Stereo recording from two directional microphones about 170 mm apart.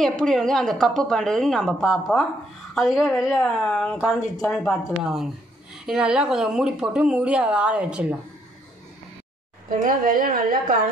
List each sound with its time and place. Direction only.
0.0 s speech: 5° left (ahead or behind)
9.7 s a woman's voice: 50° right (ahead or behind)